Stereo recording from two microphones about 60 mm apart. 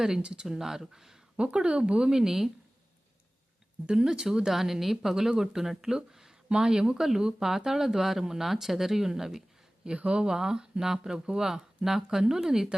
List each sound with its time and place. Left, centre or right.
0.0 s speech: centre
3.8 s speech: centre